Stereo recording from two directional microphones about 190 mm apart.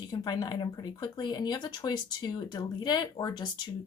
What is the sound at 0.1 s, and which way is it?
Speech, 20° left (ahead or behind).